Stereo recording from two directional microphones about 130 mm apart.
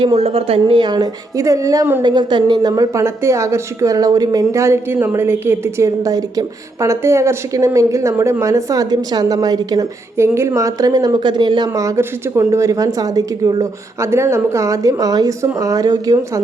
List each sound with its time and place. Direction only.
0.0 s speech: 45° right (ahead or behind)
0.6 s a woman's voice: 35° right (ahead or behind)